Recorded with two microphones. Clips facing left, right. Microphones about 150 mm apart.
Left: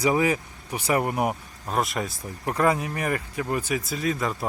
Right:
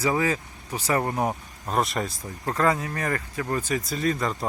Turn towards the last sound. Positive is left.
turn(degrees=5)  # may be behind; listen again after turning